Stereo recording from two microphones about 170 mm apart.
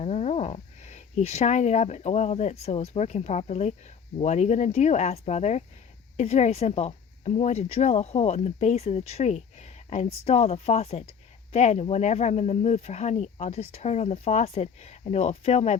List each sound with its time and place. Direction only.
0.0 s speech: 40° left (ahead or behind)